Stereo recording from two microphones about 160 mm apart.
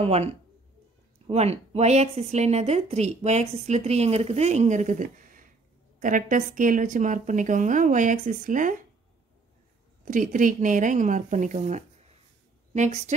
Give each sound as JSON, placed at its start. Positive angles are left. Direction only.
{"t": 0.0, "sound": "a woman's voice", "side_deg": -40}
{"t": 10.0, "sound": "a woman's voice", "side_deg": -55}